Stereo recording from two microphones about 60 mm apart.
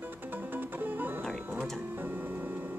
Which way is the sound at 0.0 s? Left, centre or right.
Right.